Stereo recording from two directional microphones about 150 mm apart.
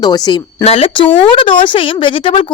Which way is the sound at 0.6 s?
40° left (ahead or behind).